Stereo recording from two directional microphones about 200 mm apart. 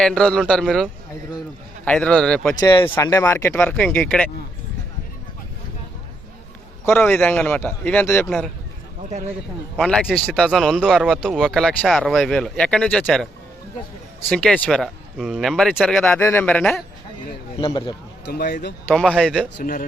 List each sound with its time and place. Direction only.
0.0 s speech: 5° left (ahead or behind)
2.6 s a man's voice: 25° left (ahead or behind); by 4.3 s 5° left (ahead or behind)
6.8 s a man's voice: 10° left (ahead or behind)
9.7 s speech: centre (ahead or behind)
14.3 s speech: 5° left (ahead or behind)
16.1 s a man's voice: 10° left (ahead or behind)
17.6 s speech: 25° left (ahead or behind)
18.3 s speech: 50° left (ahead or behind)
19.1 s speech: 5° left (ahead or behind)
19.5 s a man's voice: 45° left (ahead or behind)